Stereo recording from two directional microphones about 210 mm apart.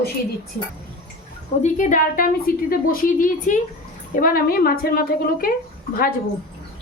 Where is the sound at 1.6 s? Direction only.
35° left (ahead or behind).